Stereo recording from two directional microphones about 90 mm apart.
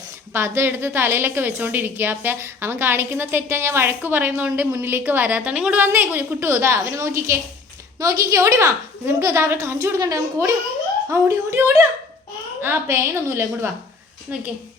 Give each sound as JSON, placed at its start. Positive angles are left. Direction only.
{"t": 0.3, "sound": "a woman's voice", "side_deg": -30}